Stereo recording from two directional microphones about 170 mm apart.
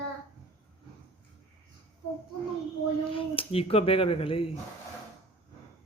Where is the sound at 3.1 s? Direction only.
30° left (ahead or behind).